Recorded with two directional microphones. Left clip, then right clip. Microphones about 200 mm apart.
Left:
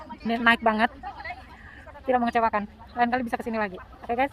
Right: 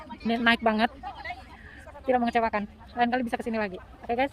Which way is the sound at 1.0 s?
45° right (ahead or behind).